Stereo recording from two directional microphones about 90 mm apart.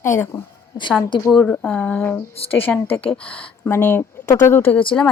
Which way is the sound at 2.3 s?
90° left.